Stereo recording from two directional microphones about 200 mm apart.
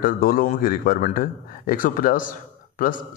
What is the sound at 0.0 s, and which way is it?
A man's voice, 45° left (ahead or behind).